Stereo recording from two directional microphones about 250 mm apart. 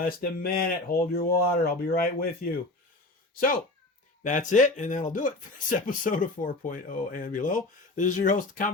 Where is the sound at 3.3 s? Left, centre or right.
Left.